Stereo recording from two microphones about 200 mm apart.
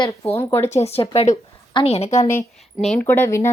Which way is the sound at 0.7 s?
30° left (ahead or behind).